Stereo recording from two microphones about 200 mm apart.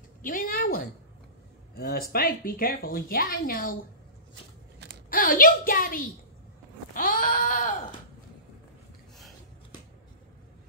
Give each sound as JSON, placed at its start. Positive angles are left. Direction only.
{"t": 0.2, "sound": "a woman's voice", "side_deg": 45}
{"t": 5.1, "sound": "a woman's voice", "side_deg": 45}
{"t": 6.9, "sound": "sheep", "side_deg": 45}